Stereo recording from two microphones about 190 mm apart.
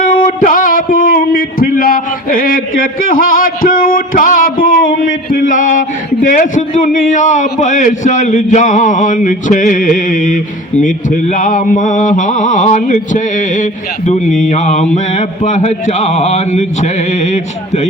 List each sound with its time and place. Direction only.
0.0 s a man's voice: 45° left (ahead or behind)